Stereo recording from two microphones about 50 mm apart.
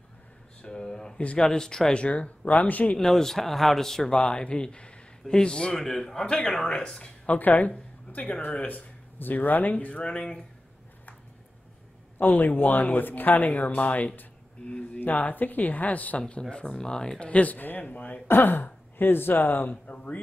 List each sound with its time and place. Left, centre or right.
0.6 s a man's voice: centre
2.0 s speech: left
3.0 s a man's voice: centre
7.2 s speech: left
8.6 s speech: left; by 10.4 s centre
12.2 s speech: left; by 17.2 s centre
17.2 s speech: left
19.7 s speech: left